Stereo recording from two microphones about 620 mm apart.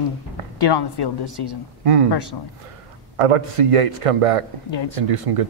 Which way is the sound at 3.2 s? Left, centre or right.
Right.